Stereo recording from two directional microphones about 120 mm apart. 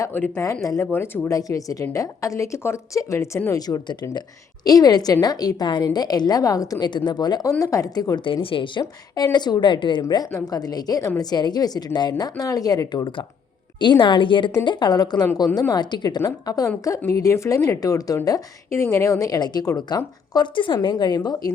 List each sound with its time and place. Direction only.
0.0 s a woman's voice: 20° left (ahead or behind); by 8.8 s 45° left (ahead or behind)
8.8 s a woman's voice: 30° left (ahead or behind)
10.0 s a woman's voice: 30° left (ahead or behind)